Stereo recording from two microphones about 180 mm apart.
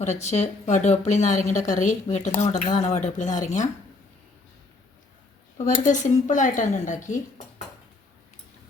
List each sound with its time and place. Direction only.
0.0 s speech: 40° left (ahead or behind)
5.5 s speech: 40° left (ahead or behind)